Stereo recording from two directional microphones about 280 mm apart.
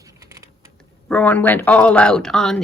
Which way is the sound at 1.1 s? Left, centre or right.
Centre.